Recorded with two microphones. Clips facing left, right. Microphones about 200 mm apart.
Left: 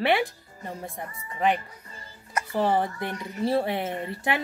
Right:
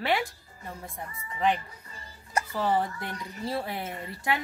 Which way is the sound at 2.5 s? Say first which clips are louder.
Left 4 dB; 25° left (ahead or behind).